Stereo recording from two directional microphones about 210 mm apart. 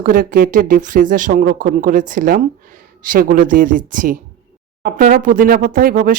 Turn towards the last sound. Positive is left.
turn(degrees=-45)  # may be behind; listen again after turning